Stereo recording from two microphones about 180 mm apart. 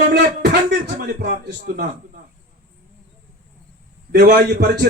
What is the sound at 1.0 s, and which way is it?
Speech, 50° right (ahead or behind).